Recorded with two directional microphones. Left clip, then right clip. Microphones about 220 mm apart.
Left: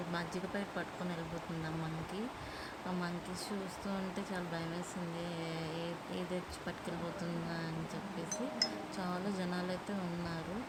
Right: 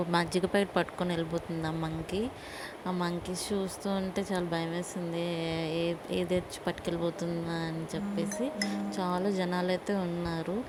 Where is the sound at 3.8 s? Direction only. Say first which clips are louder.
Right 8 dB; 25° right (ahead or behind).